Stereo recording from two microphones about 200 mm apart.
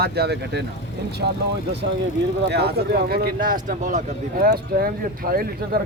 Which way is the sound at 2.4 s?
55° right (ahead or behind).